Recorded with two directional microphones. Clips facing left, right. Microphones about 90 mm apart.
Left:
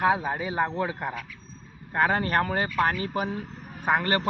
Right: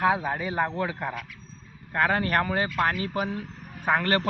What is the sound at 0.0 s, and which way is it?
A man's voice, 15° left (ahead or behind).